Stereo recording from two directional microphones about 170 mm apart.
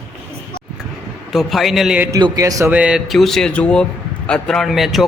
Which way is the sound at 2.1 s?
20° right (ahead or behind).